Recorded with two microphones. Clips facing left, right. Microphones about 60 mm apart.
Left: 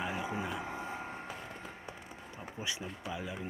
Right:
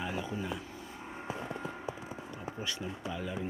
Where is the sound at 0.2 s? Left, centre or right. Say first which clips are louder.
Even; left.